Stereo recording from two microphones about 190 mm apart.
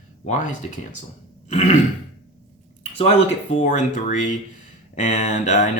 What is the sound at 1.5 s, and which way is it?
Speech, 35° left (ahead or behind).